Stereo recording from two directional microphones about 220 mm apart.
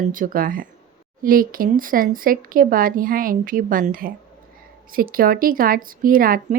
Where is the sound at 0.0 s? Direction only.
40° right (ahead or behind).